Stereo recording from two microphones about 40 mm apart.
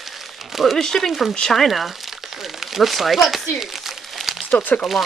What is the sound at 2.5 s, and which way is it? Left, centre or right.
Crumpling, centre.